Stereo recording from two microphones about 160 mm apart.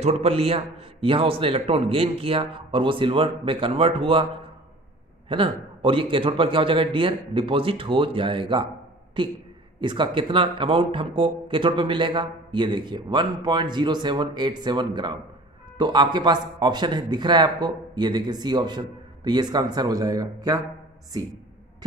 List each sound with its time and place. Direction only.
0.0 s a man's voice: 40° right (ahead or behind)
5.3 s a man's voice: 30° right (ahead or behind)